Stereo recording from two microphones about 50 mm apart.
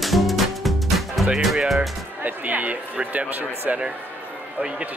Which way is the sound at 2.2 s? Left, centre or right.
Right.